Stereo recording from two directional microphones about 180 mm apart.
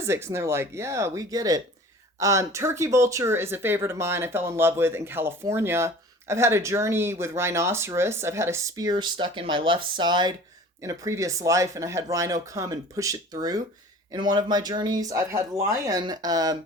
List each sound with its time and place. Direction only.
0.0 s speech: 15° right (ahead or behind)